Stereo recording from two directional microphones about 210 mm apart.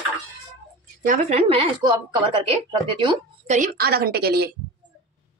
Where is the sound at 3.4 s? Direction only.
40° right (ahead or behind).